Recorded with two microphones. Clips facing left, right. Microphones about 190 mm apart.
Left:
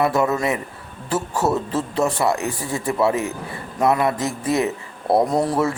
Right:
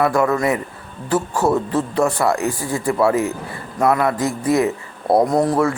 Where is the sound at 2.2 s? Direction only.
20° left (ahead or behind).